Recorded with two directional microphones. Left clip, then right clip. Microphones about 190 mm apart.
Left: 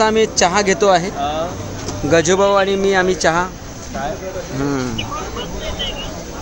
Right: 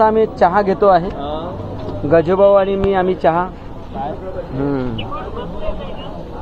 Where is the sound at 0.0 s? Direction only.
25° left (ahead or behind).